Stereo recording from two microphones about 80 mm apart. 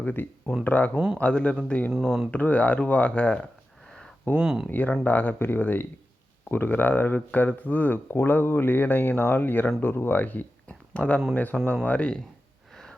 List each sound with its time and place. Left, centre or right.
0.0 s speech: left
0.9 s speech: centre
1.2 s speech: centre
1.9 s speech: centre
2.3 s speech: centre
4.4 s speech: centre
4.7 s speech: left